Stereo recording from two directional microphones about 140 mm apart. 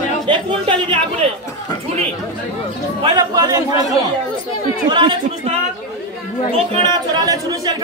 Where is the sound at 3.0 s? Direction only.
30° right (ahead or behind).